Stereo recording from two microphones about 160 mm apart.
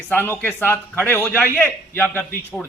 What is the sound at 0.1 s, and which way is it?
A woman's voice, 10° left (ahead or behind).